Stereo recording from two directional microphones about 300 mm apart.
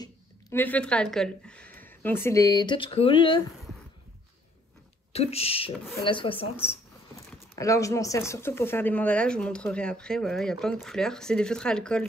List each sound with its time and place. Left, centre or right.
0.0 s speech: centre
5.1 s speech: centre
7.5 s speech: centre